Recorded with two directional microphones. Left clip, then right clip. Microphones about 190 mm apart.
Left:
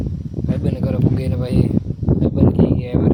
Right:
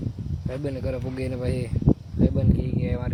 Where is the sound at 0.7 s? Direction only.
10° left (ahead or behind).